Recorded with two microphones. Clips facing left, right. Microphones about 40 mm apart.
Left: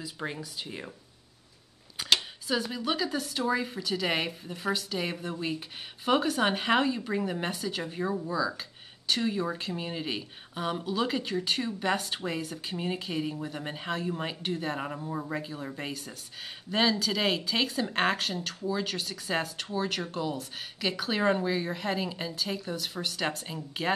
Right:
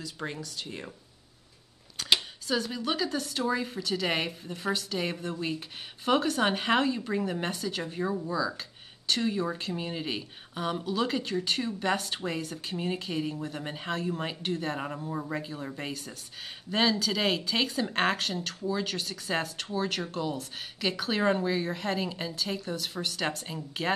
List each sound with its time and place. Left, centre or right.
0.0 s speech: centre
2.0 s a sound: centre
2.4 s a woman's voice: centre